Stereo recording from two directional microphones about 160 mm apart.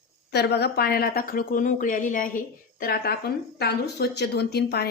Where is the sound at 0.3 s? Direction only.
90° left.